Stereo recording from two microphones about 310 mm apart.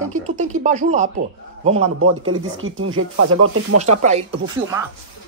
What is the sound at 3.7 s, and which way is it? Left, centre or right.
Speech, right.